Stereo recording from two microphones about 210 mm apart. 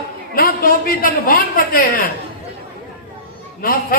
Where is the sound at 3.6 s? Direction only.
45° left (ahead or behind).